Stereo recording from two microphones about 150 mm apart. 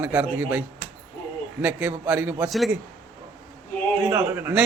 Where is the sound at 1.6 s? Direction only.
10° right (ahead or behind).